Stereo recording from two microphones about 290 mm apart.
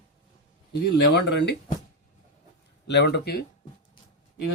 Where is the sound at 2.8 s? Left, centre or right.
Left.